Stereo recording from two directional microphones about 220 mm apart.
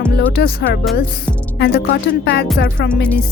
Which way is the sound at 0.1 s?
45° left (ahead or behind).